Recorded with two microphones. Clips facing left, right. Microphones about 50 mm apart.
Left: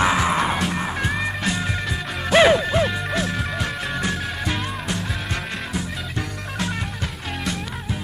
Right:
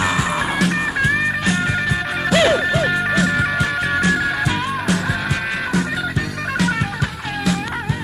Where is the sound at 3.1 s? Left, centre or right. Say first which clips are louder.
Right 7 dB; right.